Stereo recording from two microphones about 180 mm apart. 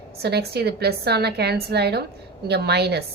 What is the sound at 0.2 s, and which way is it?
A woman's voice, 65° right (ahead or behind).